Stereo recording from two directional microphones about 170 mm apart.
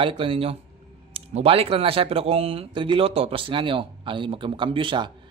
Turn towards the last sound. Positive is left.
turn(degrees=-30)  # may be behind; listen again after turning